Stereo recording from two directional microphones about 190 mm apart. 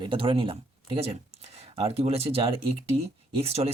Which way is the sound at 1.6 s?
30° right (ahead or behind).